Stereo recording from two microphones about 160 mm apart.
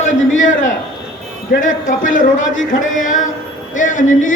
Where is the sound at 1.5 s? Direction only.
55° left (ahead or behind).